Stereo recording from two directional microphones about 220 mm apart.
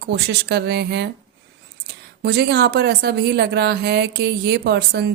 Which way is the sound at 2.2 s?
50° right (ahead or behind).